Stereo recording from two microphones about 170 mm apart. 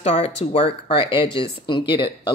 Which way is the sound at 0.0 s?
40° left (ahead or behind).